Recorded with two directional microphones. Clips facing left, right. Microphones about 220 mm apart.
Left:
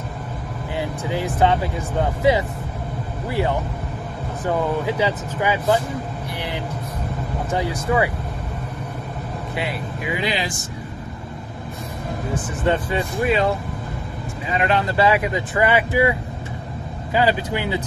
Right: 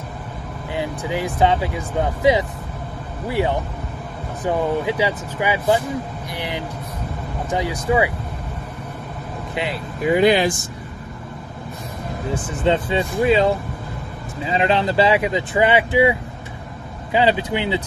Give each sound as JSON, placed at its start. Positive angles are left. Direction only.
{"t": 0.7, "sound": "speech", "side_deg": -15}
{"t": 6.3, "sound": "vehicle", "side_deg": -15}
{"t": 7.5, "sound": "speech", "side_deg": -15}
{"t": 10.0, "sound": "speech", "side_deg": -50}
{"t": 12.6, "sound": "speech", "side_deg": -25}